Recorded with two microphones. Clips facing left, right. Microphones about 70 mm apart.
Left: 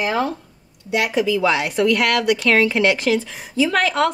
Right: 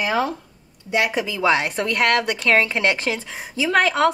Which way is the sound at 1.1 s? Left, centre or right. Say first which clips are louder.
Left 2 dB; right.